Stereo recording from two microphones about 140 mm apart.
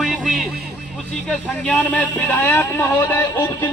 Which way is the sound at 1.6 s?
10° left (ahead or behind).